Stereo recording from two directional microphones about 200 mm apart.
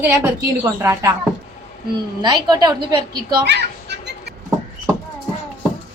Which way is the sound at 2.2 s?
20° right (ahead or behind).